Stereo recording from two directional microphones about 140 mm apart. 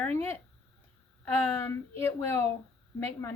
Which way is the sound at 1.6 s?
20° left (ahead or behind).